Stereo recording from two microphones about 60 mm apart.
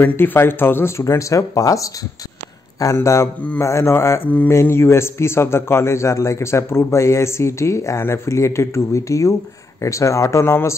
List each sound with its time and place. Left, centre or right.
0.0 s a man's voice: left
2.8 s a man's voice: left